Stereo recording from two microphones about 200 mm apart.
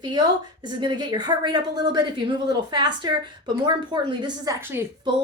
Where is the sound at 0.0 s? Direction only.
20° right (ahead or behind).